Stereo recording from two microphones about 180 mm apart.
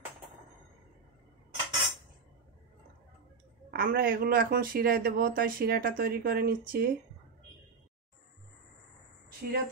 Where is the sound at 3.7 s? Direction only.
55° right (ahead or behind).